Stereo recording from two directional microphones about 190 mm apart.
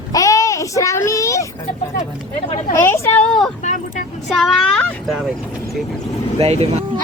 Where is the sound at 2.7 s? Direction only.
15° left (ahead or behind).